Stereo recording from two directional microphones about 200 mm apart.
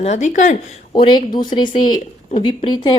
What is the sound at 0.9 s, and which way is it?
Speech, 25° left (ahead or behind).